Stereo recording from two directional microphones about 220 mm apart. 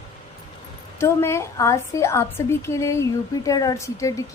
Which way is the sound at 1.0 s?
10° left (ahead or behind).